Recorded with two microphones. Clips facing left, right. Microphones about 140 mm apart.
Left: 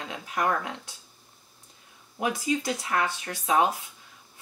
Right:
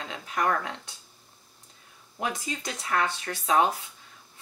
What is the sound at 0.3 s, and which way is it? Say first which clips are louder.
Speech: even; 15° left (ahead or behind).